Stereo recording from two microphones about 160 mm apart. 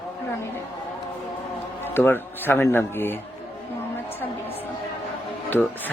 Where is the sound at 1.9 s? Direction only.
15° left (ahead or behind).